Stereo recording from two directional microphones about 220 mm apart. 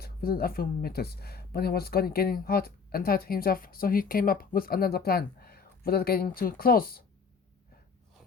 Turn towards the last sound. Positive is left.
turn(degrees=45)  # may be behind; listen again after turning